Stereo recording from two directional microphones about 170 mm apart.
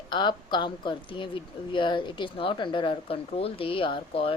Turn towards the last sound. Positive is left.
turn(degrees=35)  # may be behind; listen again after turning